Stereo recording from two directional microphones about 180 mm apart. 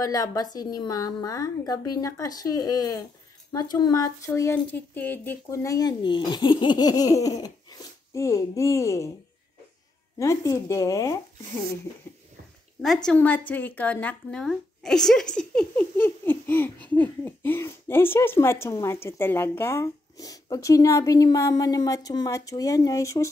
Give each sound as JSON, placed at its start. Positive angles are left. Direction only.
{"t": 0.0, "sound": "a woman's voice", "side_deg": 20}
{"t": 10.1, "sound": "a woman's voice", "side_deg": 15}
{"t": 12.8, "sound": "a woman's voice", "side_deg": 5}